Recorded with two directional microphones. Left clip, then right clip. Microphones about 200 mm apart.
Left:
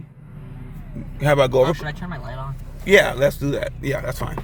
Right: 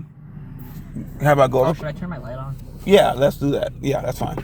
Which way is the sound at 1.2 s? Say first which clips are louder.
Right 1 dB; 25° left (ahead or behind).